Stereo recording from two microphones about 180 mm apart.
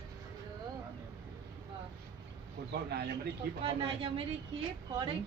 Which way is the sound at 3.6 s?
30° right (ahead or behind).